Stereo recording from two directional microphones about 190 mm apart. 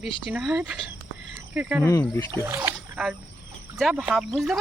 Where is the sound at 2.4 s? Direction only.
10° right (ahead or behind).